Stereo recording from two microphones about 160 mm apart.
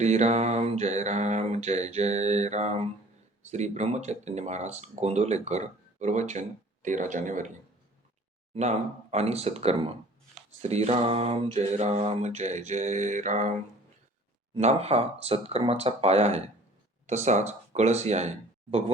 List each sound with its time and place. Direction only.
0.0 s speech: 45° right (ahead or behind)
8.5 s speech: 45° right (ahead or behind)
14.5 s speech: 40° right (ahead or behind)